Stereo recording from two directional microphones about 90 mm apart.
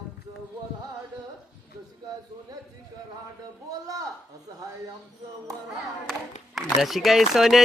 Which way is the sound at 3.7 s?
40° right (ahead or behind).